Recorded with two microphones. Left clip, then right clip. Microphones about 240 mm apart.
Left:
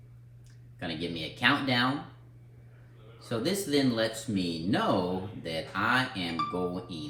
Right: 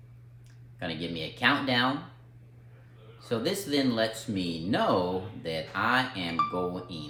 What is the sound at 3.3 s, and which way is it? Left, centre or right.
Speech, right.